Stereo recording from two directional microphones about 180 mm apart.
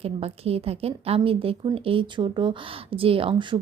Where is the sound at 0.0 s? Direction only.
35° right (ahead or behind).